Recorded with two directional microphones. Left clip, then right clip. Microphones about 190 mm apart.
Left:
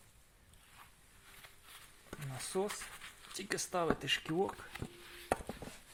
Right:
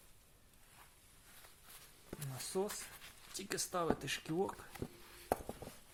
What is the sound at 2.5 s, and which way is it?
Speech, 25° left (ahead or behind).